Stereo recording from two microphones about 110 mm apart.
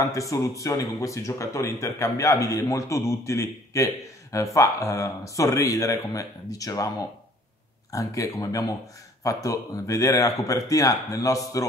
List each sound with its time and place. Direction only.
0.0 s speech: 30° left (ahead or behind)